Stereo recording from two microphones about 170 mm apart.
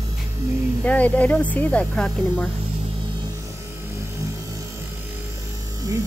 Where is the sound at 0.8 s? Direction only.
10° left (ahead or behind).